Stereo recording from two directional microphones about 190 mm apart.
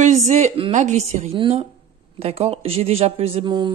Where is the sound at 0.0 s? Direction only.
35° right (ahead or behind).